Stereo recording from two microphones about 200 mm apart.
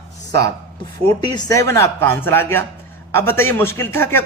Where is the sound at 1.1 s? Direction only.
20° left (ahead or behind).